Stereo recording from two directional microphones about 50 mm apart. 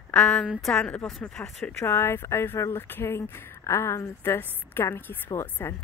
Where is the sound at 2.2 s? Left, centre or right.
Left.